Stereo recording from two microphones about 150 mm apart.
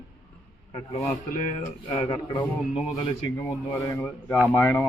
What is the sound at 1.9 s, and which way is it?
Speech, 35° left (ahead or behind).